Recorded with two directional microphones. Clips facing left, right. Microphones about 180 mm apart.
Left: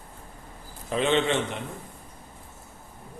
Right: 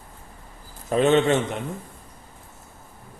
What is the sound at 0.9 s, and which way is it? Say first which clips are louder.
Speech: right 5 dB; 45° right (ahead or behind).